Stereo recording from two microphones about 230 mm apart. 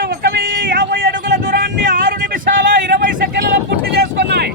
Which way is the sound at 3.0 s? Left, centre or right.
Right.